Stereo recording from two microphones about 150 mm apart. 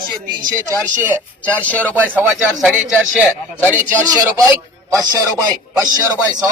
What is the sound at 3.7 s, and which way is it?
Speech, 15° right (ahead or behind).